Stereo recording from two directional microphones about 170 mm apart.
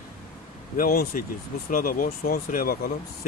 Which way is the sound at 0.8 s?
55° left (ahead or behind).